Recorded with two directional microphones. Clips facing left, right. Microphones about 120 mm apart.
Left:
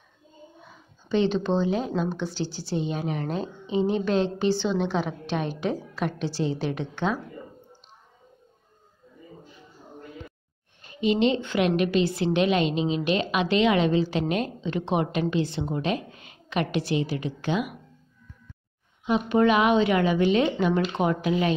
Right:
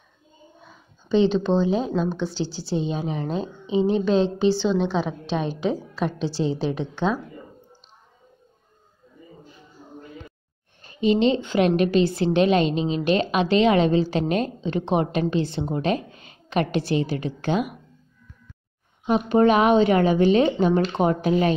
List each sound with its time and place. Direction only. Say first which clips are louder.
1.0 s a sound: right 4 dB; 25° right (ahead or behind)
1.4 s a woman's voice: right 3 dB; 20° right (ahead or behind)
1.9 s speech: right 3 dB; 15° left (ahead or behind)
2.7 s a woman's voice: right 2 dB; 25° right (ahead or behind)
10.8 s a woman's voice: right 3 dB; 35° right (ahead or behind)
19.0 s a woman's voice: right 3 dB; 40° right (ahead or behind)